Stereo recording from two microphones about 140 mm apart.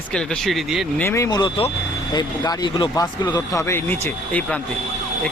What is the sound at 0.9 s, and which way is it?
A man's voice, 20° left (ahead or behind).